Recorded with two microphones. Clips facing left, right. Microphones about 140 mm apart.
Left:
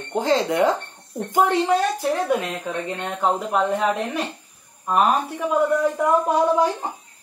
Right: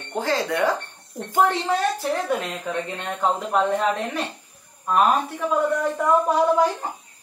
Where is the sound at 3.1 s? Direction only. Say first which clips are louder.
Even; 5° left (ahead or behind).